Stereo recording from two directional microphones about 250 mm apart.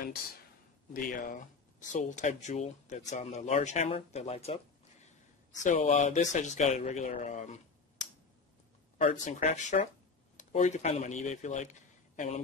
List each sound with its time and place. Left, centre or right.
0.9 s speech: left
5.6 s speech: left